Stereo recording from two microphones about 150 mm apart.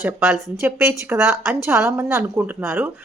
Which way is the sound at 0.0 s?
10° right (ahead or behind).